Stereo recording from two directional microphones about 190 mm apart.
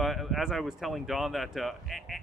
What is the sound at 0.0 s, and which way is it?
Speech, centre (ahead or behind).